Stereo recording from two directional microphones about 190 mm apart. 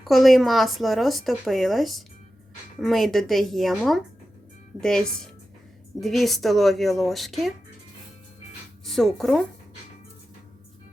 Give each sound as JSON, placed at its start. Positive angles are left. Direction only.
{"t": 0.0, "sound": "speech", "side_deg": 0}
{"t": 8.8, "sound": "speech", "side_deg": 0}